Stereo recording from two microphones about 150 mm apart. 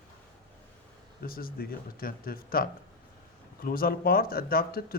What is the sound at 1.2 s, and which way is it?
Speech, 80° left.